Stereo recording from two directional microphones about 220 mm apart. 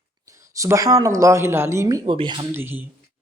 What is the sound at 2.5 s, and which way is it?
Speech, 10° right (ahead or behind).